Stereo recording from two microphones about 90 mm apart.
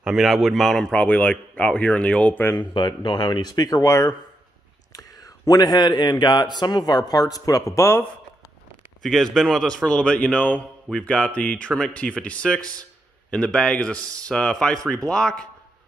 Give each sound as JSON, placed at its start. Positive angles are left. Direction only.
{"t": 0.0, "sound": "a man's voice", "side_deg": -5}
{"t": 2.6, "sound": "a man's voice", "side_deg": 60}
{"t": 9.0, "sound": "a man's voice", "side_deg": 5}